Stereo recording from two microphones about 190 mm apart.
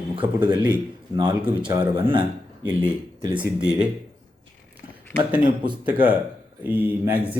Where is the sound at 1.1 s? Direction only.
20° right (ahead or behind).